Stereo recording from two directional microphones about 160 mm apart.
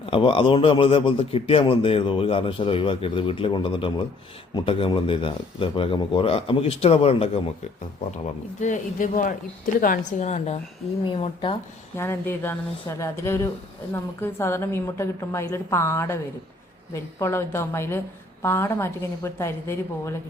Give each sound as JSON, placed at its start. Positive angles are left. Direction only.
{"t": 0.0, "sound": "a man's voice", "side_deg": 35}
{"t": 8.6, "sound": "a woman's voice", "side_deg": 55}
{"t": 11.0, "sound": "a man's voice", "side_deg": 30}
{"t": 11.9, "sound": "a woman's voice", "side_deg": 15}